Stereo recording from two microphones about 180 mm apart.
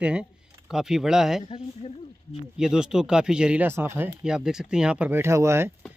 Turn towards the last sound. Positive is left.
turn(degrees=-15)  # may be behind; listen again after turning